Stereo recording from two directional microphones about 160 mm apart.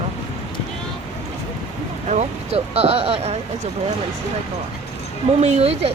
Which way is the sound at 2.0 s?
45° right (ahead or behind).